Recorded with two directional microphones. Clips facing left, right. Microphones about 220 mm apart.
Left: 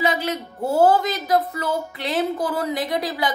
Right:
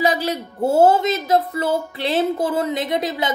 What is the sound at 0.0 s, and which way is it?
Speech, 35° right (ahead or behind).